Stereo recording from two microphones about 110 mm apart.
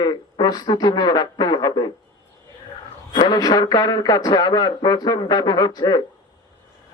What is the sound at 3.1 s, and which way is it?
A man's voice, 40° left (ahead or behind).